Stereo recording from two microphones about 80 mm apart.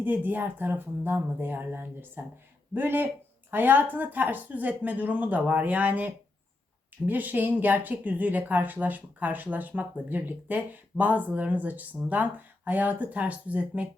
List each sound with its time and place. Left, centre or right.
0.0 s speech: right